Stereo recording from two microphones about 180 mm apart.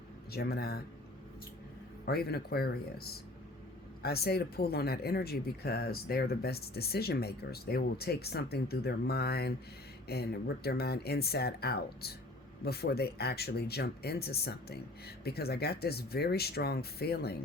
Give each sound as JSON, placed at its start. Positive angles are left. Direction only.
{"t": 0.3, "sound": "speech", "side_deg": 60}
{"t": 2.0, "sound": "speech", "side_deg": 60}